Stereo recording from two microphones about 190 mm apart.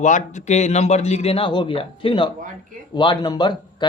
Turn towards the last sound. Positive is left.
turn(degrees=20)  # may be behind; listen again after turning